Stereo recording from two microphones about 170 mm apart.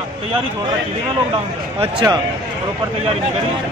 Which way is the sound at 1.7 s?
25° right (ahead or behind).